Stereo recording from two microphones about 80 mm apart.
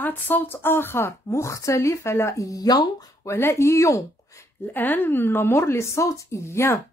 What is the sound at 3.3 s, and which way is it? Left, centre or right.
Speech, left.